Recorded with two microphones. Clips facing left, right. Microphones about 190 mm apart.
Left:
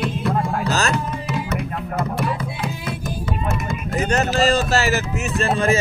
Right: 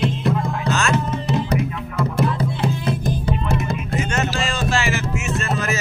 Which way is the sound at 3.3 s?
35° right (ahead or behind).